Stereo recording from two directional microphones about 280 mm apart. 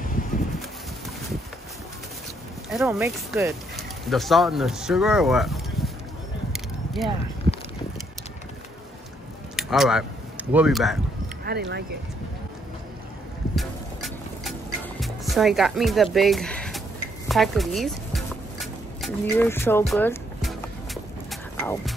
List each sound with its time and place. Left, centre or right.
2.7 s speech: centre
6.5 s single-lens reflex camera: centre
9.6 s speech: centre
11.4 s speech: right
13.6 s music: centre
15.0 s speech: centre
17.3 s a sound: centre